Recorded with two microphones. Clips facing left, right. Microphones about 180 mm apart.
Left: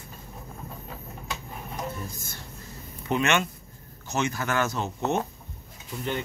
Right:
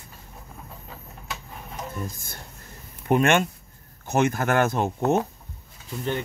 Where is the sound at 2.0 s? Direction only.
55° right (ahead or behind).